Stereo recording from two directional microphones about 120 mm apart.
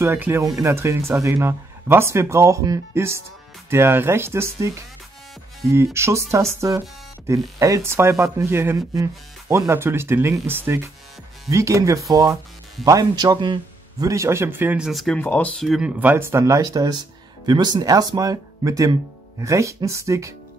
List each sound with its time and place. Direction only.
0.0 s speech: 20° right (ahead or behind)
5.9 s speech: 25° right (ahead or behind)
7.5 s speech: 25° right (ahead or behind)
14.8 s speech: centre (ahead or behind)
15.1 s speech: 15° left (ahead or behind)
15.6 s speech: centre (ahead or behind)
16.0 s speech: 15° right (ahead or behind)